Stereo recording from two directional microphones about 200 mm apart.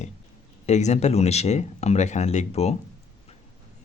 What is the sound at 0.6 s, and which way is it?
Speech, 35° left (ahead or behind).